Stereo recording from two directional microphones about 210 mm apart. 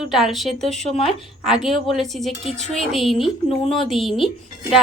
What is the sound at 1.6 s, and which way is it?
Speech, centre (ahead or behind).